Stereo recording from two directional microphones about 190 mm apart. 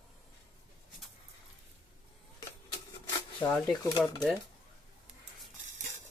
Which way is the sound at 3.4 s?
10° left (ahead or behind).